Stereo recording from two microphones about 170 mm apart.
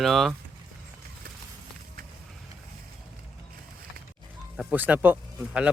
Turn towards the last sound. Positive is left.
turn(degrees=-10)  # may be behind; listen again after turning